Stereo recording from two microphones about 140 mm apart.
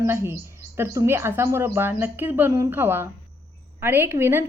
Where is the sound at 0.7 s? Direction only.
20° right (ahead or behind).